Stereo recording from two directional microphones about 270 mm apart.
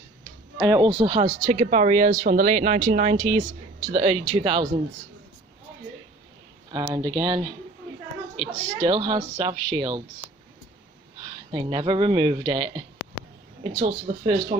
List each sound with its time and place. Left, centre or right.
0.6 s speech: centre
6.9 s speech: centre